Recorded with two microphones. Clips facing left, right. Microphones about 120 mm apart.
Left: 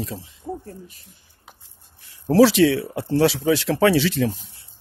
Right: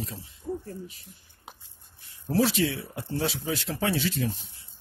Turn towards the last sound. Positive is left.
turn(degrees=90)